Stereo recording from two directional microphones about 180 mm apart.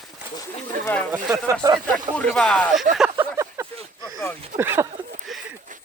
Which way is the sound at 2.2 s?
5° left (ahead or behind).